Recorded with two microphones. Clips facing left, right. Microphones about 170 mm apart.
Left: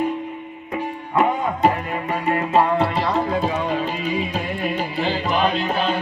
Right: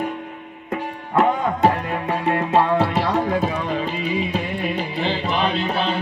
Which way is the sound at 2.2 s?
15° left (ahead or behind).